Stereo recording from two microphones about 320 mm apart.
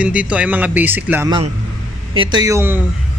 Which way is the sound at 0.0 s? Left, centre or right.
Centre.